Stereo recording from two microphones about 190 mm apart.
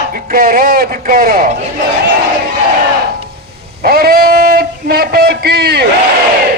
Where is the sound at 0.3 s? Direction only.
50° right (ahead or behind).